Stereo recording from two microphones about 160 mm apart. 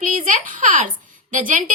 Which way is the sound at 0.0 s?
55° right (ahead or behind).